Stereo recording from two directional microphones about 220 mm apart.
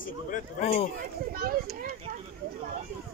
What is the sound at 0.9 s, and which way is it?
Speech, 40° right (ahead or behind).